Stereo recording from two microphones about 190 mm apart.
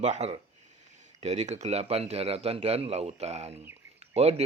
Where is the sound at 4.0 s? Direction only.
35° right (ahead or behind).